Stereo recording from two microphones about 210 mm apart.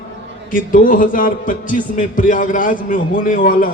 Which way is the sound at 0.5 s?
40° left (ahead or behind).